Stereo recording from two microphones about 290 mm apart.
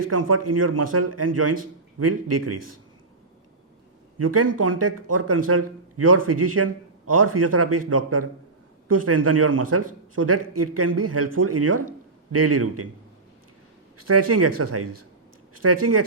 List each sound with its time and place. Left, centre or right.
0.1 s a man's voice: right
4.2 s a man's voice: right
14.0 s a man's voice: right